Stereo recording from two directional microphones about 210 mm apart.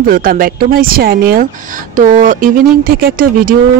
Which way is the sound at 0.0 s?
40° right (ahead or behind).